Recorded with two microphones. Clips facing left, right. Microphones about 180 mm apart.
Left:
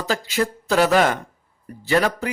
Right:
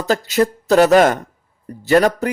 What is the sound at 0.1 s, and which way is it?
A man's voice, 40° right (ahead or behind).